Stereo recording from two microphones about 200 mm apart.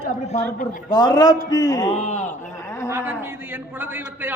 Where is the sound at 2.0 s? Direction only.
35° left (ahead or behind).